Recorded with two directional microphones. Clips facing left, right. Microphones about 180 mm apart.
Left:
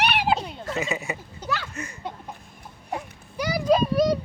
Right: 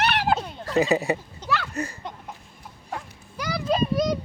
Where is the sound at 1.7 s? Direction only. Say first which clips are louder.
Right 6 dB; 35° right (ahead or behind).